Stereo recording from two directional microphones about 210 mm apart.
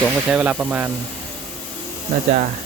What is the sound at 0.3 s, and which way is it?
Speech, 5° right (ahead or behind).